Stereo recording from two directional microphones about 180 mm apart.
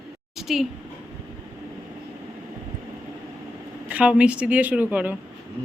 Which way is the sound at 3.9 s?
5° right (ahead or behind).